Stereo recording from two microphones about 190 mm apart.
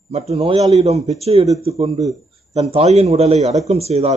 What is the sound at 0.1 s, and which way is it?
A man's voice, 35° right (ahead or behind).